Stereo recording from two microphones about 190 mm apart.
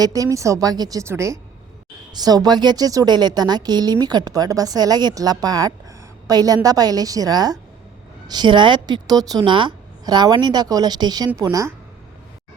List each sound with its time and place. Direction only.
0.0 s a woman's voice: 20° right (ahead or behind)